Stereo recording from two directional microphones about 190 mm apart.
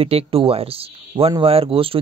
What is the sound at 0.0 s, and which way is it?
A man's voice, 30° right (ahead or behind).